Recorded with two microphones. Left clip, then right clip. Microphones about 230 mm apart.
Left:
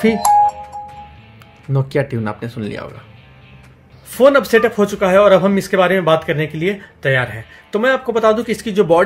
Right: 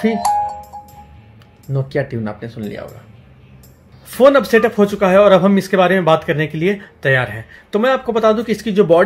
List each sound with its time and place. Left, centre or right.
0.0 s speech: left
1.7 s speech: centre
4.1 s speech: centre